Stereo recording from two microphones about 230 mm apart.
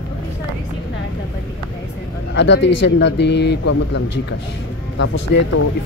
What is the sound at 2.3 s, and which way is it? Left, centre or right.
Speech, left.